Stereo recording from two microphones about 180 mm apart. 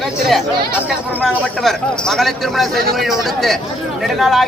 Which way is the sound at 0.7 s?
10° left (ahead or behind).